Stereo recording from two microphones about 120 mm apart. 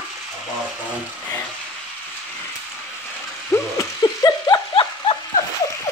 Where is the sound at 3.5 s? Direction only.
25° left (ahead or behind).